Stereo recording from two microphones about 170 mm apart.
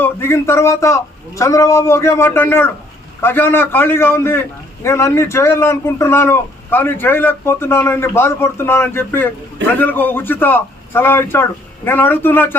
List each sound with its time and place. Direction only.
0.0 s a man's voice: 15° left (ahead or behind)